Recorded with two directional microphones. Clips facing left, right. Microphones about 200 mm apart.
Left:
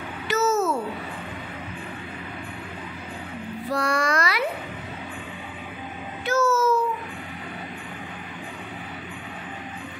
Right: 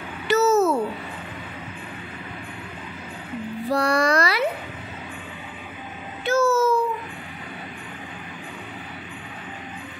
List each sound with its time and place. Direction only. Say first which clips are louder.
0.3 s a sound: right 4 dB; 35° right (ahead or behind)
3.7 s child singing: right 4 dB; 35° right (ahead or behind)
6.2 s babbling: right 2 dB; 30° right (ahead or behind)